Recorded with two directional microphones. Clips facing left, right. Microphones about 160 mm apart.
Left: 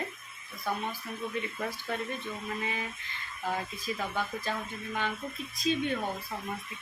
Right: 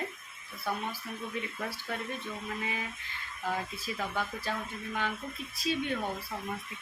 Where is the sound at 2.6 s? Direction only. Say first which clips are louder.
Left 1 dB; 5° right (ahead or behind).